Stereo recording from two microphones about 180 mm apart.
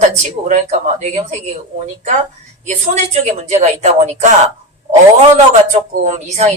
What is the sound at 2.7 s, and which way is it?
Speech, 40° right (ahead or behind).